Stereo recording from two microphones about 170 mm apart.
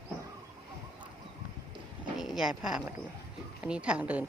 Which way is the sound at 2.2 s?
5° right (ahead or behind).